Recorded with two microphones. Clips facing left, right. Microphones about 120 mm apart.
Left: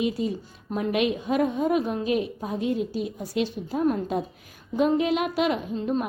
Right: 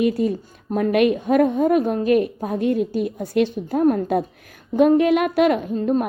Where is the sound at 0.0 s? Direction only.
55° right (ahead or behind).